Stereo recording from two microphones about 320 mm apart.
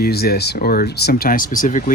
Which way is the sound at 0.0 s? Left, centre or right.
Left.